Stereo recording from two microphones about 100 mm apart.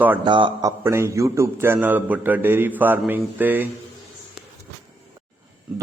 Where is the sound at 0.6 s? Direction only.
25° right (ahead or behind).